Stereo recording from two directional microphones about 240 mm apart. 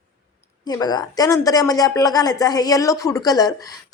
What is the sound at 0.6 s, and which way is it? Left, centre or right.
A woman's voice, centre.